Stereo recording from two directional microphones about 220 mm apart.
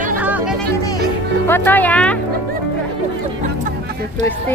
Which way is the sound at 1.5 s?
10° left (ahead or behind).